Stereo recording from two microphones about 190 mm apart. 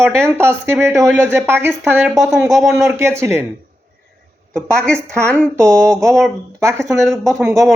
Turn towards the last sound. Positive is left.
turn(degrees=0)  # may be behind; listen again after turning